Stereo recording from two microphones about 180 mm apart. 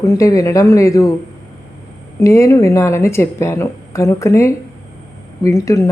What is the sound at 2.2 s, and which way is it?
Speech, 15° left (ahead or behind).